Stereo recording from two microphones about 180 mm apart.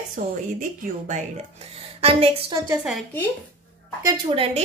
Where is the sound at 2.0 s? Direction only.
35° right (ahead or behind).